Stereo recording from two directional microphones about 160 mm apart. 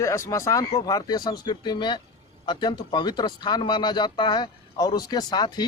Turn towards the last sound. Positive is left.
turn(degrees=25)  # may be behind; listen again after turning